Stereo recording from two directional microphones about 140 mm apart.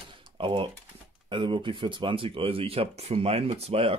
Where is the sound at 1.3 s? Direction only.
35° right (ahead or behind).